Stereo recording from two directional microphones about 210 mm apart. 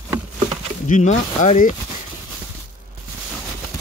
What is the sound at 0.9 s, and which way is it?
Speech, 35° left (ahead or behind).